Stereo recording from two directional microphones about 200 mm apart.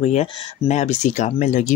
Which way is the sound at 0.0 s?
35° left (ahead or behind).